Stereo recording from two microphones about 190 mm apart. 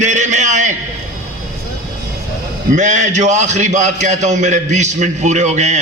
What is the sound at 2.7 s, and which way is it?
A man's voice, 40° right (ahead or behind).